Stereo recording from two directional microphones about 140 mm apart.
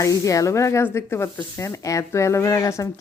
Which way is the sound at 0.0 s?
25° left (ahead or behind).